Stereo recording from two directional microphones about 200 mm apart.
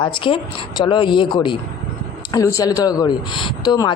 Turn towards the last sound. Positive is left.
turn(degrees=20)  # may be behind; listen again after turning